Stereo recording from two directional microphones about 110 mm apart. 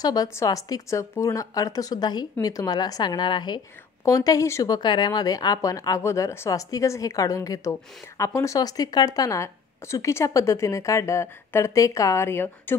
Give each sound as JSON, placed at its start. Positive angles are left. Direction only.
{"t": 0.0, "sound": "speech", "side_deg": 35}
{"t": 4.7, "sound": "speech", "side_deg": 40}